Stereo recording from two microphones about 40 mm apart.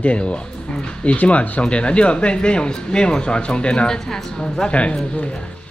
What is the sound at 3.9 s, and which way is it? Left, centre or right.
Speech, centre.